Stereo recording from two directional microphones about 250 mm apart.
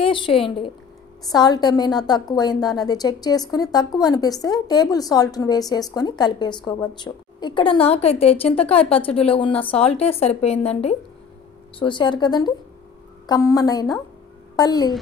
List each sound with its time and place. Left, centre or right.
0.0 s a woman's voice: left